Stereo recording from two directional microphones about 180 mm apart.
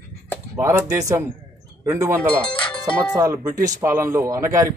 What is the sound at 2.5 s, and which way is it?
Music, 30° left (ahead or behind).